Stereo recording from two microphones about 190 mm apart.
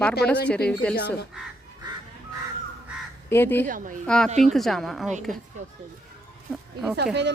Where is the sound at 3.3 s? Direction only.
10° left (ahead or behind).